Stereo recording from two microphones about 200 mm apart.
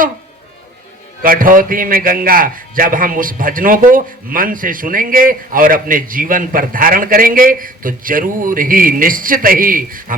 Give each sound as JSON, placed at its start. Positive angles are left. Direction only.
{"t": 1.2, "sound": "a man's voice", "side_deg": -45}